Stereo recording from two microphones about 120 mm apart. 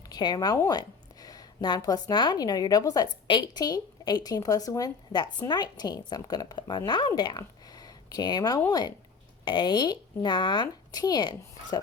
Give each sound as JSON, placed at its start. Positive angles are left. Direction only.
{"t": 0.1, "sound": "a woman's voice", "side_deg": 35}